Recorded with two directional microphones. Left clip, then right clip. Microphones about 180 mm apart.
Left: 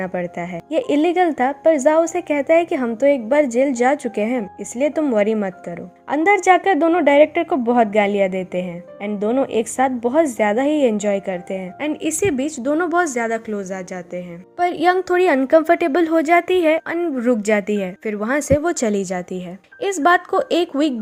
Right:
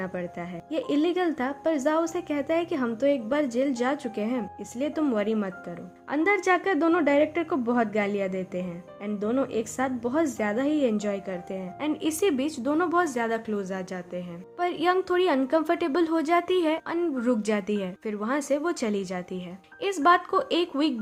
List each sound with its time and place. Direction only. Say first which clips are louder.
0.0 s a woman's voice: left 9 dB; 25° left (ahead or behind)